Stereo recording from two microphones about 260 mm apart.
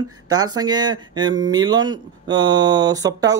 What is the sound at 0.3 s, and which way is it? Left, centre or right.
Speech, centre.